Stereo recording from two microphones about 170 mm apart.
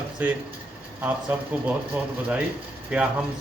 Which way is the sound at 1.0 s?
10° right (ahead or behind).